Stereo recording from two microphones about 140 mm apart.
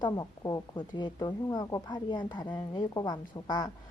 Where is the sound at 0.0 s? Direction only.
25° left (ahead or behind).